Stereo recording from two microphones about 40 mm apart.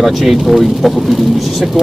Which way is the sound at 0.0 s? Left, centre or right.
Centre.